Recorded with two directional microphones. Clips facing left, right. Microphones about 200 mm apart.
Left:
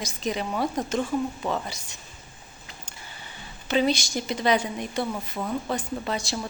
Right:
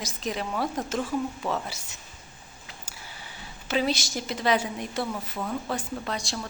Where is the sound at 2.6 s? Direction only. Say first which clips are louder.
Even; 5° right (ahead or behind).